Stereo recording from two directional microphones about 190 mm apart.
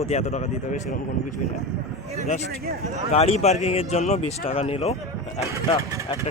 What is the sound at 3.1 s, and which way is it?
Speech, 35° left (ahead or behind).